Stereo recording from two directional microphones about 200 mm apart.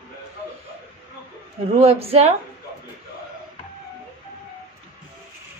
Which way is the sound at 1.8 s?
30° right (ahead or behind).